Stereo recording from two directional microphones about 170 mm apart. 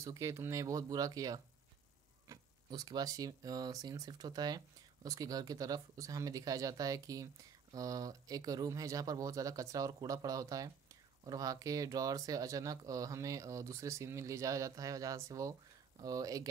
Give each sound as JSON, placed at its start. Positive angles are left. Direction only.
{"t": 0.0, "sound": "speech", "side_deg": -15}